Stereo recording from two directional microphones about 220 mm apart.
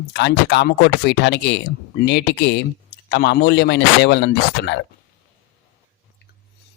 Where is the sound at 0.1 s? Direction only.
50° left (ahead or behind).